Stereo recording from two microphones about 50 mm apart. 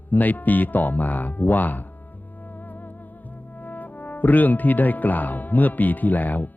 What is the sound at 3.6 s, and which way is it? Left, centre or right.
Speech, left.